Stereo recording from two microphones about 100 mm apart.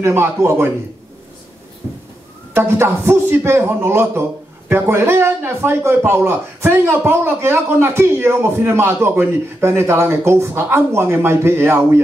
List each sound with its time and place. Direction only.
0.0 s a man's voice: 25° right (ahead or behind)
2.5 s a man's voice: 25° right (ahead or behind)